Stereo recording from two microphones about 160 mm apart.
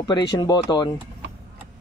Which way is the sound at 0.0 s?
25° left (ahead or behind).